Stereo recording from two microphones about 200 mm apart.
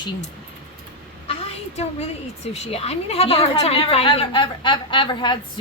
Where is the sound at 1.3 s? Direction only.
30° left (ahead or behind).